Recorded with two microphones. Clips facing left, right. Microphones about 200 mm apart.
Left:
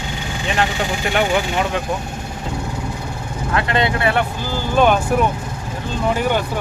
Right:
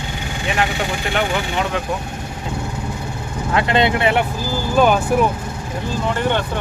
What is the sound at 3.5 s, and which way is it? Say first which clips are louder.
Speech: right 2 dB; 25° right (ahead or behind).